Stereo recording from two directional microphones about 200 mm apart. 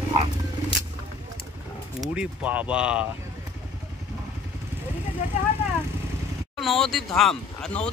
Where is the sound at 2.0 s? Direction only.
5° right (ahead or behind).